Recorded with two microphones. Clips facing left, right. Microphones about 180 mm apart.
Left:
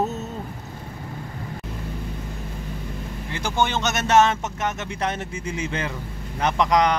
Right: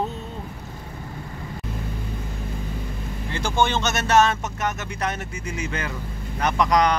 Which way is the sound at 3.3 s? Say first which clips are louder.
Right 1 dB; 15° left (ahead or behind).